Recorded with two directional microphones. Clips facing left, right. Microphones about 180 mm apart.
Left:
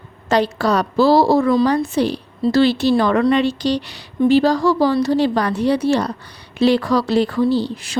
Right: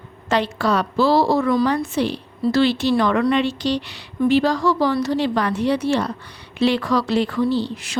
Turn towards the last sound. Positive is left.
turn(degrees=35)  # may be behind; listen again after turning